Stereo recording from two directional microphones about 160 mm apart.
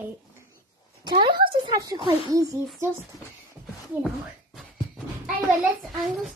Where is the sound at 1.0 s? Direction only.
30° right (ahead or behind).